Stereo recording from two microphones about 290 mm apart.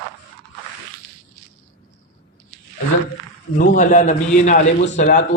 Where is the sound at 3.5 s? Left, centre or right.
Left.